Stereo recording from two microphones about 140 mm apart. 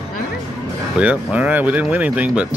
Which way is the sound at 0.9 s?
10° right (ahead or behind).